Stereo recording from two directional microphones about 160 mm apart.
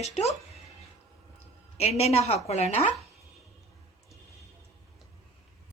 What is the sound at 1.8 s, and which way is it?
A woman's voice, 40° left (ahead or behind).